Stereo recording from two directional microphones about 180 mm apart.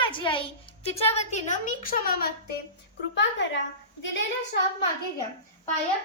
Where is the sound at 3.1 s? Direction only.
85° left.